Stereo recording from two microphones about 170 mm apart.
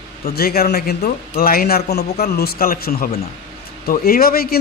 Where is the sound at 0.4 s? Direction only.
65° left (ahead or behind).